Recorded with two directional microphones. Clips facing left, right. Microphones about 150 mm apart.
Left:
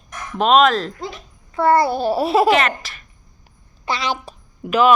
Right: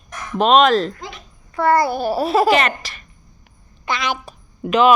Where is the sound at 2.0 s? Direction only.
Centre (ahead or behind).